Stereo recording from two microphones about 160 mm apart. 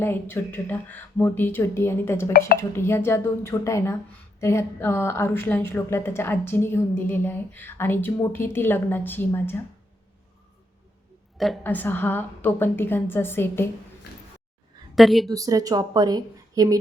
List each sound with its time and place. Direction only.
0.0 s speech: 15° left (ahead or behind)
11.6 s speech: 10° left (ahead or behind)
14.9 s a woman's voice: centre (ahead or behind)
15.3 s speech: 20° right (ahead or behind)